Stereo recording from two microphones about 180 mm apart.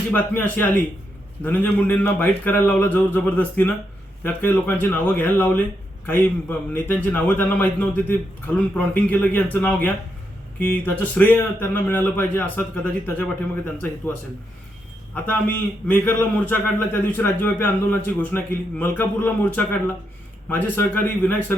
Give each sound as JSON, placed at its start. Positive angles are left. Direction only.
{"t": 0.1, "sound": "a man's voice", "side_deg": 10}
{"t": 15.1, "sound": "a man's voice", "side_deg": 10}